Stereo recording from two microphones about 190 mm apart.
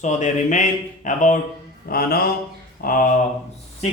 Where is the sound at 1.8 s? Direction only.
50° left (ahead or behind).